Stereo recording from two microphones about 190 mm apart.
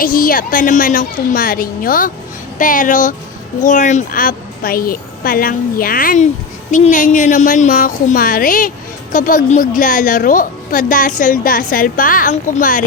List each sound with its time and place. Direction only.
0.0 s a woman's voice: 50° left (ahead or behind)